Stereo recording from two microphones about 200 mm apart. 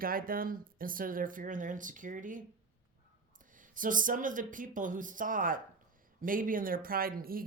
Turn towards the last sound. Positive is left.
turn(degrees=-45)  # may be behind; listen again after turning